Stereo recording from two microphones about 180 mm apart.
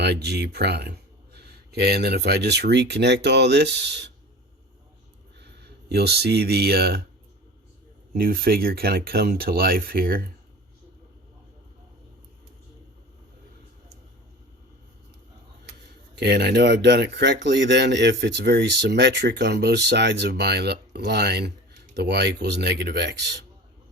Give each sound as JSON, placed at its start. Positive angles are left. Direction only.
{"t": 0.0, "sound": "speech", "side_deg": -65}
{"t": 5.6, "sound": "speech", "side_deg": -65}
{"t": 8.1, "sound": "speech", "side_deg": -55}
{"t": 16.1, "sound": "speech", "side_deg": -65}